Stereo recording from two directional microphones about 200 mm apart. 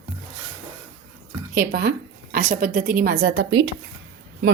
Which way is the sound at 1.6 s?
50° right (ahead or behind).